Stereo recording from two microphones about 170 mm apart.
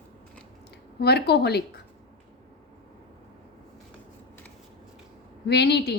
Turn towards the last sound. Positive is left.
turn(degrees=75)  # may be behind; listen again after turning